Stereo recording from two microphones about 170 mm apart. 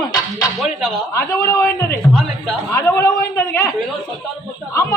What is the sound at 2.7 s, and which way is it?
Speech, 15° left (ahead or behind).